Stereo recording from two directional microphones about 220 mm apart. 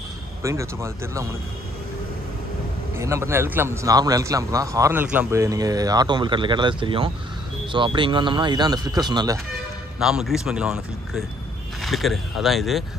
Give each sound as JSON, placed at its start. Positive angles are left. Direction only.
{"t": 0.4, "sound": "a man's voice", "side_deg": -15}
{"t": 3.0, "sound": "a man's voice", "side_deg": -10}
{"t": 9.9, "sound": "speech", "side_deg": -5}